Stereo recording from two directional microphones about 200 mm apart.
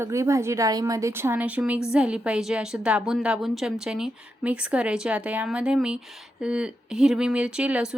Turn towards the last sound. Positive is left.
turn(degrees=-5)  # may be behind; listen again after turning